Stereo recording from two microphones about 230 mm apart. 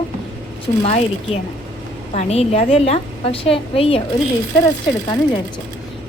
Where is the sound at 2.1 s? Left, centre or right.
Left.